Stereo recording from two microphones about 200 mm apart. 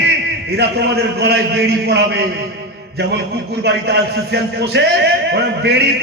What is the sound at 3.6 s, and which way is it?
A man's voice, 55° right (ahead or behind).